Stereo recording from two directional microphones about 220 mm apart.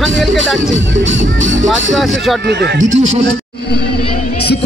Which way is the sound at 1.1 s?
35° right (ahead or behind).